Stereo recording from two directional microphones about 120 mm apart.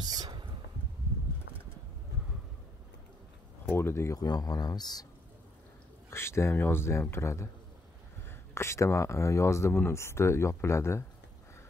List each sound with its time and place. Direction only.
0.0 s a sound: 35° right (ahead or behind)
3.6 s speech: 20° left (ahead or behind); by 5.0 s 35° left (ahead or behind)
6.0 s speech: 20° left (ahead or behind)